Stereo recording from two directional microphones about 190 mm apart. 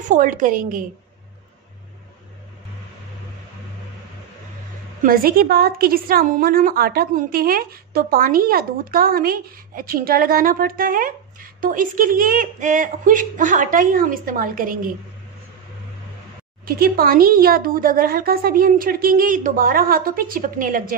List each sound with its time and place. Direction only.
0.1 s a woman's voice: 45° right (ahead or behind)
5.0 s a woman's voice: 50° right (ahead or behind)
16.6 s a woman's voice: 50° right (ahead or behind)